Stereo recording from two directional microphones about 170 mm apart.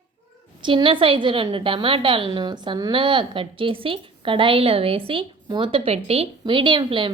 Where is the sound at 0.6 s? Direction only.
30° right (ahead or behind).